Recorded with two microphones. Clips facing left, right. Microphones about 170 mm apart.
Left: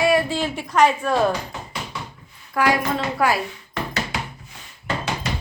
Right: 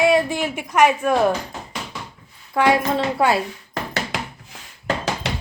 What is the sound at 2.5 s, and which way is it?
Speech, 25° right (ahead or behind).